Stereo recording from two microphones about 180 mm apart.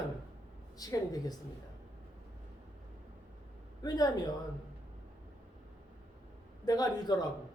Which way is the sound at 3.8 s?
20° left (ahead or behind).